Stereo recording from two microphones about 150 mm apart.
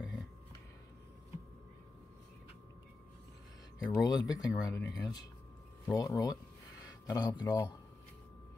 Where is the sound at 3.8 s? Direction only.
25° left (ahead or behind).